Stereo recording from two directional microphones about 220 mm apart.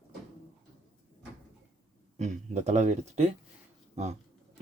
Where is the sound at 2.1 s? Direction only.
30° right (ahead or behind).